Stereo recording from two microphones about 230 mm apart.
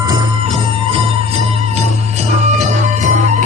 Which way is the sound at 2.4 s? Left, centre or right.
Right.